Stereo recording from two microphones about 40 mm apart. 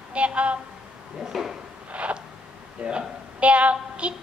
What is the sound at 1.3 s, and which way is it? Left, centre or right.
Speech, centre.